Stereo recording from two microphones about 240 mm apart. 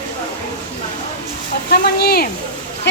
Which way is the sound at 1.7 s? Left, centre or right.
Left.